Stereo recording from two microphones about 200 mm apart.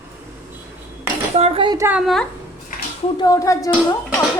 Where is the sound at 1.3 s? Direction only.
30° right (ahead or behind).